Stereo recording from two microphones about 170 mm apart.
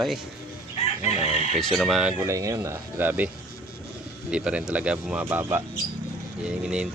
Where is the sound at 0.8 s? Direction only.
40° left (ahead or behind).